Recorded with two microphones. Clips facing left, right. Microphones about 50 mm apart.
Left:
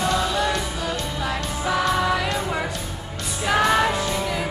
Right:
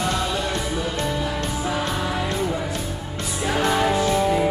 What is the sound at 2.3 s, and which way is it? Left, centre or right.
Music, left.